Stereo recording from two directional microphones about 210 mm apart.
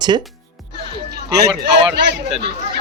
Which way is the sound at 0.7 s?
50° right (ahead or behind).